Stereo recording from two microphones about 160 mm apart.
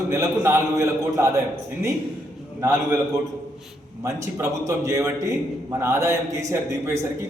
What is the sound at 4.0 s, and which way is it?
A man's voice, 20° right (ahead or behind).